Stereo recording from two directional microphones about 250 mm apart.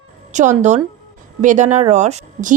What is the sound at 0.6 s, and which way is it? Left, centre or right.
Speech, right.